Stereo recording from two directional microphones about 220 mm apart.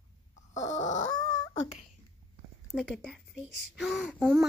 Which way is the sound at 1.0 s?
20° left (ahead or behind).